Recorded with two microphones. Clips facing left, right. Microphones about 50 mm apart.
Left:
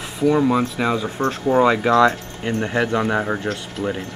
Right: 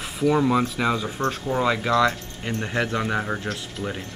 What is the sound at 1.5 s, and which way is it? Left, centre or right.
Speech, left.